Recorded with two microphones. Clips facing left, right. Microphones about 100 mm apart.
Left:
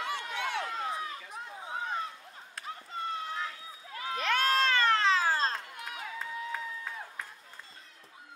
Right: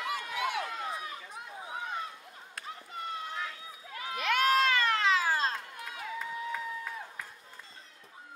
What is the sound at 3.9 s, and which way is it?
Crowd, 30° left (ahead or behind).